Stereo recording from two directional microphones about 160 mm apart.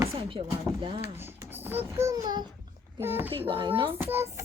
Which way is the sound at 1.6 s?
15° right (ahead or behind).